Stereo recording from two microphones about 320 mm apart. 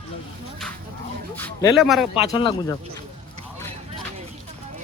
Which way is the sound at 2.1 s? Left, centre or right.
Centre.